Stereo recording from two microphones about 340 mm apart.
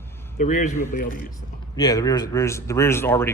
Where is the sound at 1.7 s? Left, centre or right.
Centre.